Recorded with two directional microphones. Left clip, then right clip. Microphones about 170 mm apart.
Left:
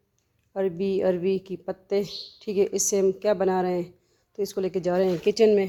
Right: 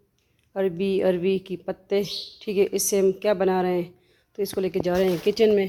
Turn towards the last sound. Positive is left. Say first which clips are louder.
# even
turn(degrees=10)  # may be behind; listen again after turning